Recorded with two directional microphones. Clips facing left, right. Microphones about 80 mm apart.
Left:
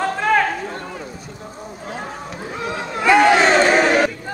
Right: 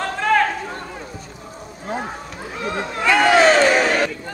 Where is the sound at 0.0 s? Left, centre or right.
Centre.